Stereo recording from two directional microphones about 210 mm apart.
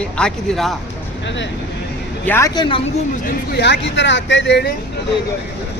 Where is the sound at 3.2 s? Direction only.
50° left (ahead or behind).